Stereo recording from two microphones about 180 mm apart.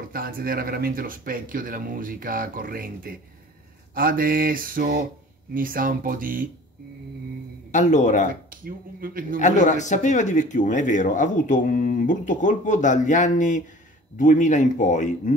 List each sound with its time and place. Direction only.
0.1 s speech: 55° right (ahead or behind)
7.7 s speech: 45° left (ahead or behind)
8.3 s speech: 50° right (ahead or behind)
9.4 s speech: 40° left (ahead or behind)